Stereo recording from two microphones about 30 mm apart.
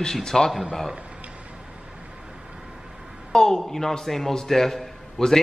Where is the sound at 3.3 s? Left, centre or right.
Centre.